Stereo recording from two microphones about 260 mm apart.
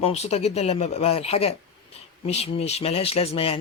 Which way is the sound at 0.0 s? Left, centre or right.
Left.